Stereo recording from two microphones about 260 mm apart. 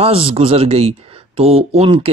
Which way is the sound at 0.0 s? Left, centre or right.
Right.